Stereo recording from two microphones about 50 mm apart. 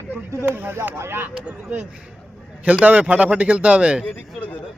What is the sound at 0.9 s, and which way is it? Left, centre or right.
Speech, right.